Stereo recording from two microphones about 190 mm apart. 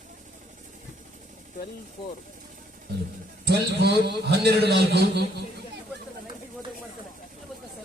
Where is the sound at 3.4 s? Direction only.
60° right (ahead or behind).